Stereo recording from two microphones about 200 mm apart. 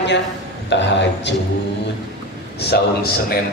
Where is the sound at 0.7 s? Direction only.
60° left (ahead or behind).